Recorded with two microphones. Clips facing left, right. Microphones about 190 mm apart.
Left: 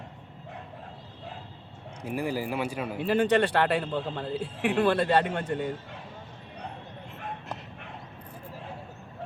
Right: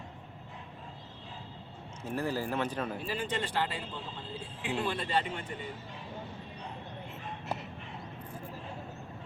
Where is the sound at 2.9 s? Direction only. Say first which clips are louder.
Left 12 dB; 65° left (ahead or behind).